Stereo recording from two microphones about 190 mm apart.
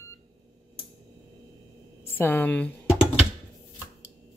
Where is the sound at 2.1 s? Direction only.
10° left (ahead or behind).